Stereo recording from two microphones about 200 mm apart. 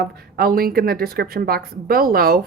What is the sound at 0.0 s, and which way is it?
Speech, 50° right (ahead or behind).